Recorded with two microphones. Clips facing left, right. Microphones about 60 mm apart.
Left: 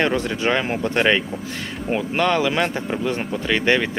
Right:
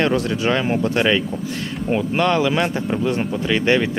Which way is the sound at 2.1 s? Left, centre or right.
Centre.